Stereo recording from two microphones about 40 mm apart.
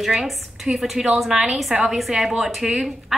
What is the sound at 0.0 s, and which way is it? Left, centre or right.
A woman's voice, centre.